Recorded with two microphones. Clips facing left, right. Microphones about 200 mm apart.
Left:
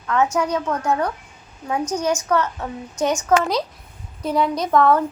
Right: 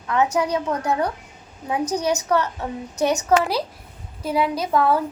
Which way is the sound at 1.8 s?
35° right (ahead or behind).